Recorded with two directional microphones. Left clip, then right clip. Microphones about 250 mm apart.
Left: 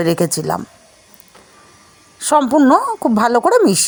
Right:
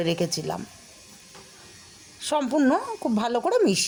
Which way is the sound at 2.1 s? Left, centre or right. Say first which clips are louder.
Left 11 dB; left.